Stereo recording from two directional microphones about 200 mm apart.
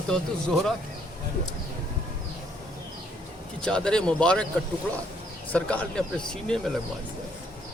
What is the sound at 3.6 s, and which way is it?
Speech, 5° left (ahead or behind).